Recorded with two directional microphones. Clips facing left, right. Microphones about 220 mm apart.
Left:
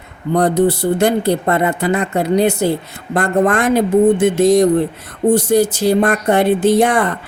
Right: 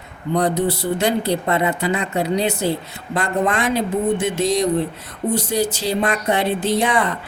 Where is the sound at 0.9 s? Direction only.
50° left (ahead or behind).